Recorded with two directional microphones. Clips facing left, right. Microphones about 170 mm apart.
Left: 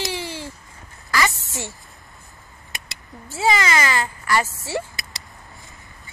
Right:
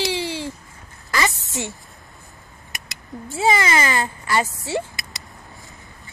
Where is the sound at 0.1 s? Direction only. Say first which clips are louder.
Right 4 dB; 20° right (ahead or behind).